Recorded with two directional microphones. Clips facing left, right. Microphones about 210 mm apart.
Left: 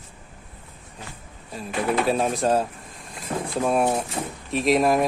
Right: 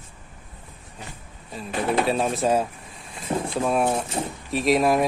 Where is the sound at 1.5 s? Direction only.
Centre (ahead or behind).